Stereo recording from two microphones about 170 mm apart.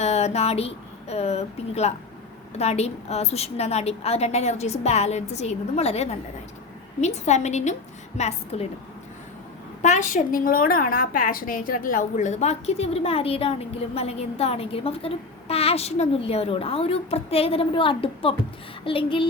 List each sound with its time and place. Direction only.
0.0 s a woman's voice: 40° left (ahead or behind)
9.8 s a woman's voice: 45° left (ahead or behind)